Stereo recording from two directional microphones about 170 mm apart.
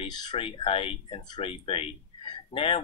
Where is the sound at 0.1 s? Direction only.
25° left (ahead or behind).